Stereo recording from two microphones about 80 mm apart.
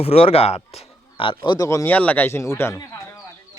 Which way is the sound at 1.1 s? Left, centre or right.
Left.